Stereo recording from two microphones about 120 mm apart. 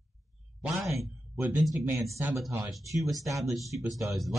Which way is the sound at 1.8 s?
25° right (ahead or behind).